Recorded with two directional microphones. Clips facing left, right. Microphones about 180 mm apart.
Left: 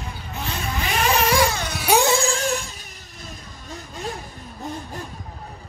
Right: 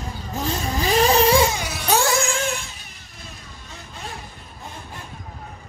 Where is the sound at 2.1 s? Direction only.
35° left (ahead or behind).